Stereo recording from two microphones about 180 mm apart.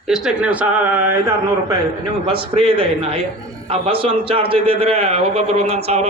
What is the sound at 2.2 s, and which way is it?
A man's voice, 30° right (ahead or behind).